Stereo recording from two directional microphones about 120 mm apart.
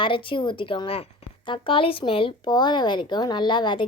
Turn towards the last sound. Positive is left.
turn(degrees=40)  # may be behind; listen again after turning